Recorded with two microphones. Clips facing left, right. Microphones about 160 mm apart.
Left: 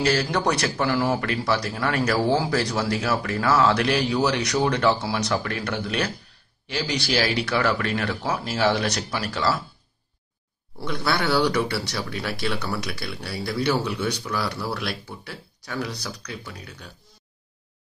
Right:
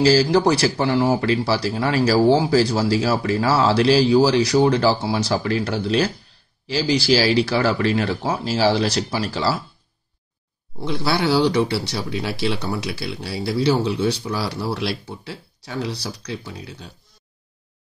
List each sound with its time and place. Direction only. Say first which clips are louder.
0.0 s speech: right 7 dB; 30° right (ahead or behind)
10.8 s speech: right 4 dB; 25° right (ahead or behind)